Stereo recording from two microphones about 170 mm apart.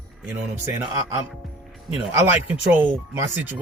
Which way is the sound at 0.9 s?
20° right (ahead or behind).